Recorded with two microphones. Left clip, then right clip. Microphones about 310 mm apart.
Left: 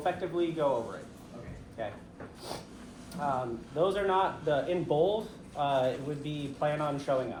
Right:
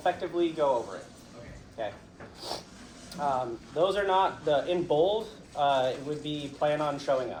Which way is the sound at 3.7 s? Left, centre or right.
Right.